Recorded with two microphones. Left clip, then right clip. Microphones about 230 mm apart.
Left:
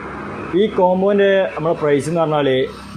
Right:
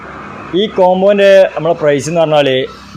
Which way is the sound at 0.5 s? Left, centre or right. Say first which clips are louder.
Right 5 dB; right.